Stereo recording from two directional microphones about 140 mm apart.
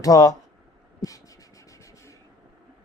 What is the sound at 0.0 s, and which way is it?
Speech, 25° left (ahead or behind).